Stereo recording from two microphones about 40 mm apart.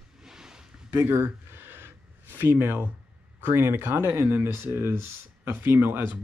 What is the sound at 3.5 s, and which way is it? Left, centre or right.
Speech, right.